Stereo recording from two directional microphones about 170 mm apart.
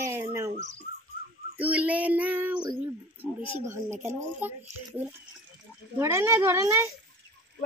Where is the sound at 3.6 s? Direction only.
15° right (ahead or behind).